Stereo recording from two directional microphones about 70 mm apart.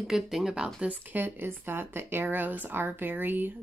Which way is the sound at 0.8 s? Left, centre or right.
Right.